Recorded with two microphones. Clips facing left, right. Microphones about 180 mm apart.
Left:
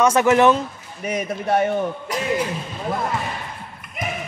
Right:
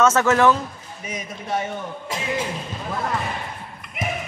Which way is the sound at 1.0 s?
60° left (ahead or behind).